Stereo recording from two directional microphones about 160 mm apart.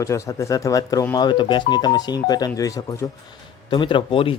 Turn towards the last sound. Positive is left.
turn(degrees=35)  # may be behind; listen again after turning